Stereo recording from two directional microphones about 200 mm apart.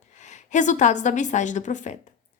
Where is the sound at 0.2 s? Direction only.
35° left (ahead or behind).